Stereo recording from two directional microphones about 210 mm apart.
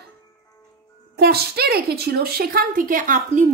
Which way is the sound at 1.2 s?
50° right (ahead or behind).